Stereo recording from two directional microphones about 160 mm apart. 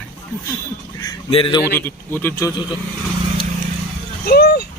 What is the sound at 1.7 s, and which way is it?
Speech, 15° left (ahead or behind).